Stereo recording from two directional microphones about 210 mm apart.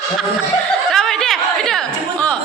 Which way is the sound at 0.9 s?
Centre (ahead or behind).